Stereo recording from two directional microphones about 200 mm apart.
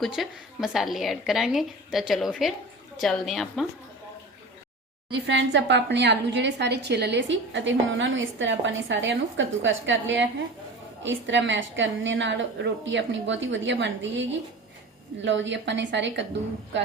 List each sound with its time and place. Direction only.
0.0 s a woman's voice: centre (ahead or behind)
5.2 s a woman's voice: 60° right (ahead or behind)